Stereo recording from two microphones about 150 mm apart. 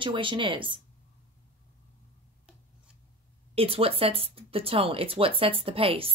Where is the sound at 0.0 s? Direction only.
35° right (ahead or behind).